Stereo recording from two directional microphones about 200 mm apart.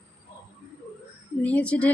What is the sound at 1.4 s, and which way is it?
Speech, 5° left (ahead or behind).